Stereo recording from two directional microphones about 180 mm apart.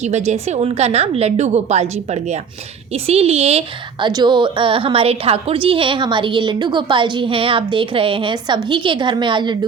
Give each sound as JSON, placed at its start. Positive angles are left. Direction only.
{"t": 0.0, "sound": "a woman's voice", "side_deg": -40}